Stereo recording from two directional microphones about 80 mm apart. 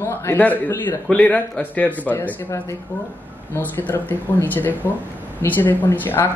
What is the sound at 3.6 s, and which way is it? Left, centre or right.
Speech, left.